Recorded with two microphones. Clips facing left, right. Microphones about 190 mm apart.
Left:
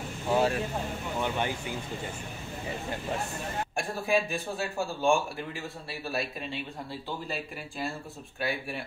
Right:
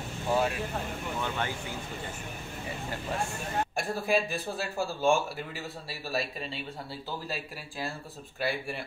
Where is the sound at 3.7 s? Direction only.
Centre (ahead or behind).